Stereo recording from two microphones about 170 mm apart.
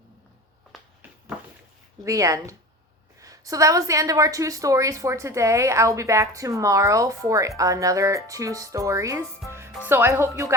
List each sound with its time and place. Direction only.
2.0 s a woman's voice: 20° right (ahead or behind)